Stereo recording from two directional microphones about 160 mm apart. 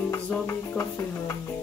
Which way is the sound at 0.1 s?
20° left (ahead or behind).